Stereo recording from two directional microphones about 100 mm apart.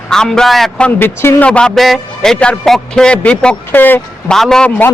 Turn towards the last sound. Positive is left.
turn(degrees=5)  # may be behind; listen again after turning